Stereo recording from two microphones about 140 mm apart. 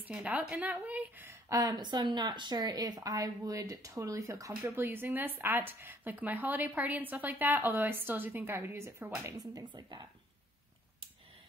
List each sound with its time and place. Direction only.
0.0 s a woman's voice: 10° right (ahead or behind)
1.5 s speech: 25° right (ahead or behind)